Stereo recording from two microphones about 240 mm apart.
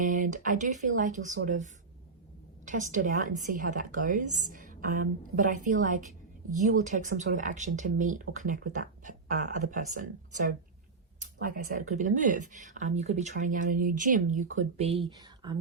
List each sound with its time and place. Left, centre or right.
0.0 s speech: right
2.6 s speech: right
11.4 s speech: right